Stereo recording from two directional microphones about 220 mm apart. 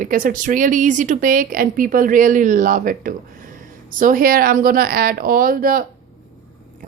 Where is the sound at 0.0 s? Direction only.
40° right (ahead or behind).